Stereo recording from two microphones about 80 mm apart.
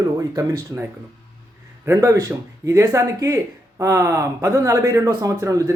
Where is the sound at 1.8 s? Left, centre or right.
Right.